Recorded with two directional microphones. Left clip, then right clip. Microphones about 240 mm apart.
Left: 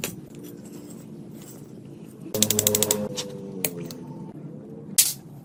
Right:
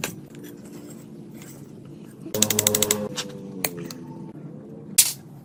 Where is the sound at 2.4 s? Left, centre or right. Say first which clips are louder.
Right 1 dB; centre.